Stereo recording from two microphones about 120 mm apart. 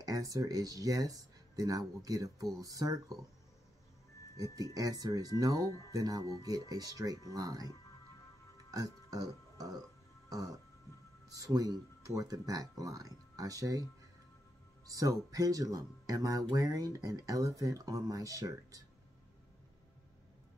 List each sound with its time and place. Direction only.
0.0 s speech: 30° right (ahead or behind)
4.4 s speech: 30° right (ahead or behind)
8.7 s speech: 30° right (ahead or behind)
14.9 s speech: 30° right (ahead or behind)